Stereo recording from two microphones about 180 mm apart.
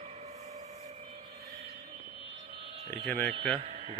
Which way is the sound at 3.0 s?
5° left (ahead or behind).